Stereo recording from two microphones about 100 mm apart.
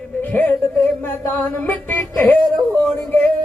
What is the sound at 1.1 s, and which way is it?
A man's voice, 20° left (ahead or behind).